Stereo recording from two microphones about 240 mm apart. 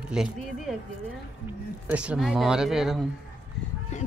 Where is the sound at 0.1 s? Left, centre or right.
Centre.